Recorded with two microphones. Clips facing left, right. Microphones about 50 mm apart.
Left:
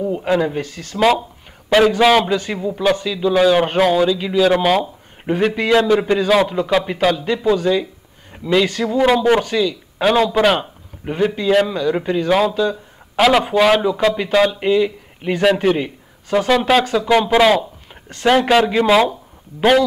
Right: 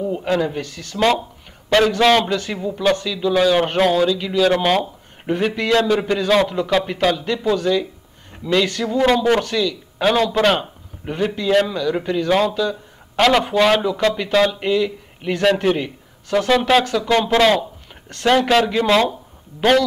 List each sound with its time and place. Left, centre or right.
0.2 s speech: centre
13.8 s speech: centre